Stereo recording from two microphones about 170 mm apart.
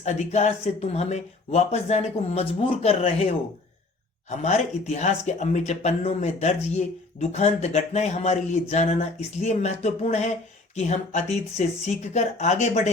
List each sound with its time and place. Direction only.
0.0 s speech: 40° left (ahead or behind)
4.4 s speech: 45° left (ahead or behind)